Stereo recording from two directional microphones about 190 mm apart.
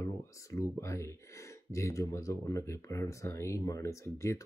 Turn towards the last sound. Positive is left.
turn(degrees=15)  # may be behind; listen again after turning